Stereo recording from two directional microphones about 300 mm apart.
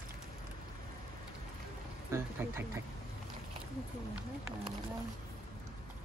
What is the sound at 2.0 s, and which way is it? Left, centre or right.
Speech, centre.